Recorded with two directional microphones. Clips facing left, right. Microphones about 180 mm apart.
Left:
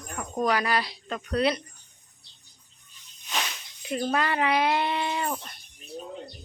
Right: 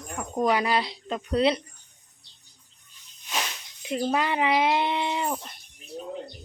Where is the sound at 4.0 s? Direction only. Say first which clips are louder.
Right 1 dB; 15° right (ahead or behind).